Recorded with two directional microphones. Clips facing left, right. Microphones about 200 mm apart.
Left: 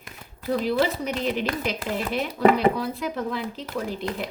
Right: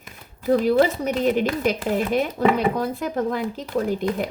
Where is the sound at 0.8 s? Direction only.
50° right (ahead or behind).